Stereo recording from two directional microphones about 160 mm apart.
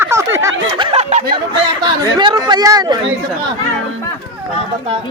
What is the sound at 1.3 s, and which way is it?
Speech, 30° right (ahead or behind).